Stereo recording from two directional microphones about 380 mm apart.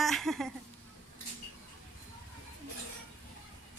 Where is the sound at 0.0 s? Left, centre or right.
Centre.